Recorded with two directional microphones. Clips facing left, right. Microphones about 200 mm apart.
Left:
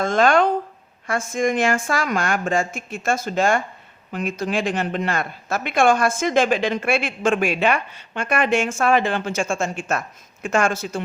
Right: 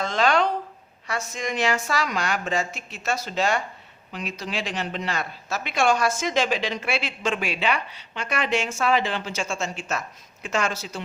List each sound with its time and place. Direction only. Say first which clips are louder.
0.0 s speech: left 5 dB; 50° left (ahead or behind)